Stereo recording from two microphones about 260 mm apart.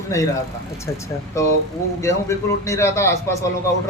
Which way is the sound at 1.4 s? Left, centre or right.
Centre.